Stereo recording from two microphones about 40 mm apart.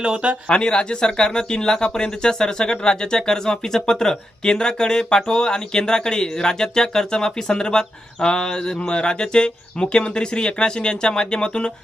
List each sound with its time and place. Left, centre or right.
0.0 s speech: right
0.4 s speech: left